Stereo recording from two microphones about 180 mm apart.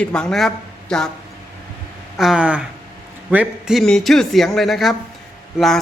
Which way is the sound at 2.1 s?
Centre (ahead or behind).